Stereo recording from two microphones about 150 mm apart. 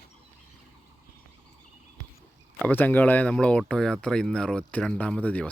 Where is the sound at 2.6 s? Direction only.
10° left (ahead or behind).